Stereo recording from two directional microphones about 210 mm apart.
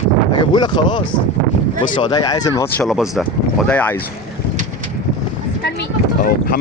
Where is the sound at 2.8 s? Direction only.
Centre (ahead or behind).